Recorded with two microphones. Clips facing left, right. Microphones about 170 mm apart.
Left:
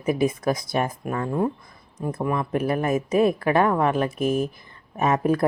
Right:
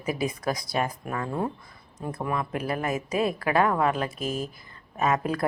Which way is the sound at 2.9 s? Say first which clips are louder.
Left 7 dB; 50° left (ahead or behind).